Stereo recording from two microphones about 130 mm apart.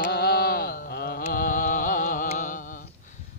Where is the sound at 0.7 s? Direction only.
85° left.